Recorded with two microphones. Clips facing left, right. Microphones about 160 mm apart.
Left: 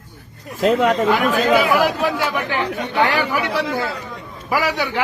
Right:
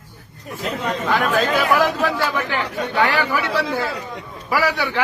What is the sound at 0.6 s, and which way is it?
Speech, 90° left.